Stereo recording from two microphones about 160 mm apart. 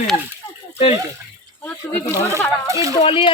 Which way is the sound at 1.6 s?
10° left (ahead or behind).